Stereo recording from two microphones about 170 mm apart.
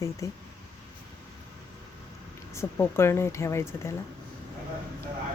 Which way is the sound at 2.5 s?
15° left (ahead or behind).